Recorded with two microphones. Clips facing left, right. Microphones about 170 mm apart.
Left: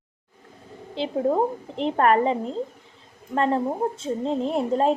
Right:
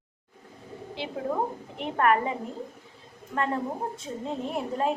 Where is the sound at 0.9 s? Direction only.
30° left (ahead or behind).